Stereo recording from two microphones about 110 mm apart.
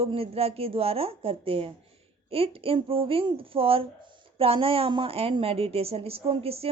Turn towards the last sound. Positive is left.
turn(degrees=-65)  # may be behind; listen again after turning